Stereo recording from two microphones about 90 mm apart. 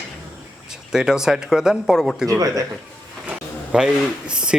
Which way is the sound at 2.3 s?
40° right (ahead or behind).